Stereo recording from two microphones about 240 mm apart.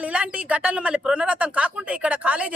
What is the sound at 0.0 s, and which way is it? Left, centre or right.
Speech, centre.